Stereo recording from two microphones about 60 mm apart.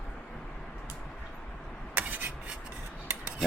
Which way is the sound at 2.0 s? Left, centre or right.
Right.